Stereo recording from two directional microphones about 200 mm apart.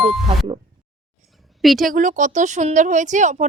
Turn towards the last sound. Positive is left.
turn(degrees=-35)  # may be behind; listen again after turning